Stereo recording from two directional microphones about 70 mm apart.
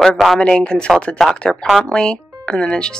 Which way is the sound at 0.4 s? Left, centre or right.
Centre.